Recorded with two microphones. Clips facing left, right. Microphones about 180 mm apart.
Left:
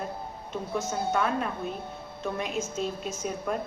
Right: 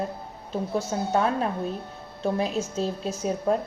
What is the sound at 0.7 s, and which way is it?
A woman's voice, 35° right (ahead or behind).